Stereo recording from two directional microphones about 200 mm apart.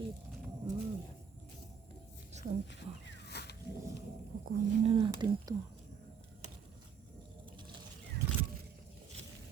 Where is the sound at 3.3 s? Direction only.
55° left (ahead or behind).